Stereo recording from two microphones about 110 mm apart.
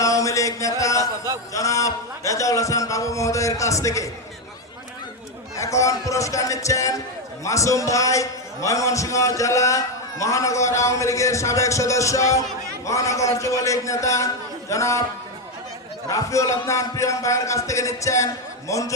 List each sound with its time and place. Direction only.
0.0 s a sound: 30° left (ahead or behind)
1.5 s a man's voice: 30° left (ahead or behind)
5.5 s a man's voice: 30° left (ahead or behind)
16.0 s a man's voice: 30° left (ahead or behind)